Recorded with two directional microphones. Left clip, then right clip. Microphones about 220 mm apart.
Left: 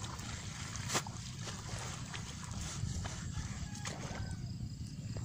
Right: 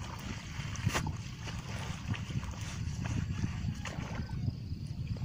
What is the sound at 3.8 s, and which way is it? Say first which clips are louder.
Music: right 1 dB; 25° right (ahead or behind).